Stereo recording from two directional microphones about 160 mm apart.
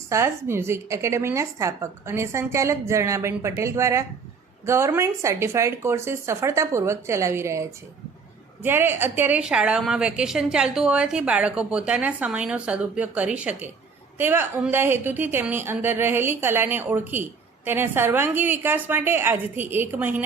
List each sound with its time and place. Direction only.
0.1 s a woman's voice: 15° right (ahead or behind)